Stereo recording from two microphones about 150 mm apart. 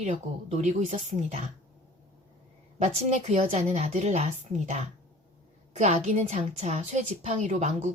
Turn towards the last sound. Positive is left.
turn(degrees=-50)  # may be behind; listen again after turning